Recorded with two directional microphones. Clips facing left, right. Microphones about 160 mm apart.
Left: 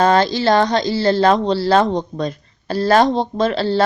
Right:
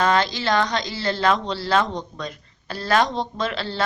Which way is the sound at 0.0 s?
35° left (ahead or behind).